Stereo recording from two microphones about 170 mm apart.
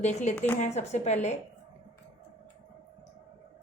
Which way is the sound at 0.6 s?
40° left (ahead or behind).